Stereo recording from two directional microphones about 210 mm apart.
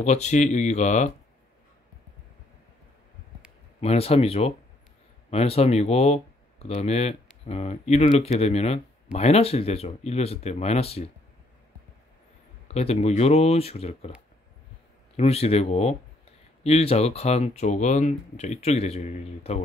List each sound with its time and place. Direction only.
0.0 s speech: 35° left (ahead or behind)
3.8 s speech: 30° left (ahead or behind)
12.7 s speech: 30° left (ahead or behind)
15.1 s speech: 30° left (ahead or behind)